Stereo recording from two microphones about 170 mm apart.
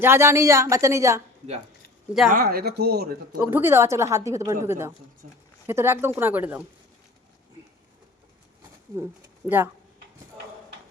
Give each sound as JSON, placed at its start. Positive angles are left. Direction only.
{"t": 0.0, "sound": "a woman's voice", "side_deg": -15}
{"t": 2.3, "sound": "speech", "side_deg": -60}
{"t": 3.3, "sound": "a woman's voice", "side_deg": -10}
{"t": 5.2, "sound": "speech", "side_deg": -45}
{"t": 5.6, "sound": "a woman's voice", "side_deg": -15}